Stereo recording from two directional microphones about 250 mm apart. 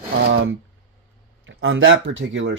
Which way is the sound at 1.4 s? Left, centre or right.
Right.